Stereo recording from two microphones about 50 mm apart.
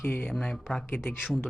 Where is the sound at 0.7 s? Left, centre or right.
Left.